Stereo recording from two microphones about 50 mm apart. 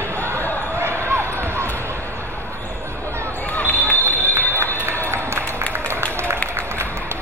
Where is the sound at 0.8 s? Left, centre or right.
Right.